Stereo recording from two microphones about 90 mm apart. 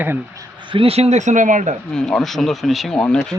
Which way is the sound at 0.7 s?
90° right.